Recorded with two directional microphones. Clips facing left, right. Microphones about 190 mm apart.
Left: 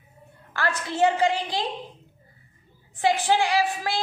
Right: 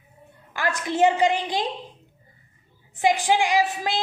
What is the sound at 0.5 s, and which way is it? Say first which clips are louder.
A woman's voice: right 2 dB; 15° right (ahead or behind).